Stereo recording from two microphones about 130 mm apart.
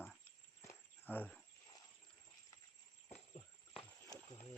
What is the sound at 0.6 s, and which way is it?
Cricket, 20° left (ahead or behind).